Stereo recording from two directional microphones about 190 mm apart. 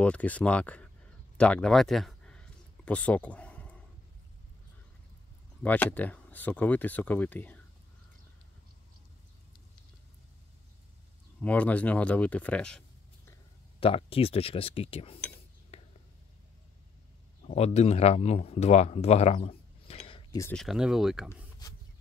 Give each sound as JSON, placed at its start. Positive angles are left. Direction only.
{"t": 0.0, "sound": "speech", "side_deg": 5}
{"t": 1.4, "sound": "a sound", "side_deg": 5}
{"t": 5.6, "sound": "speech", "side_deg": 10}
{"t": 11.4, "sound": "speech", "side_deg": 5}
{"t": 13.7, "sound": "speech", "side_deg": 30}
{"t": 15.7, "sound": "whispering", "side_deg": 35}
{"t": 17.5, "sound": "speech", "side_deg": 35}
{"t": 20.1, "sound": "a sound", "side_deg": 25}
{"t": 20.5, "sound": "speech", "side_deg": 0}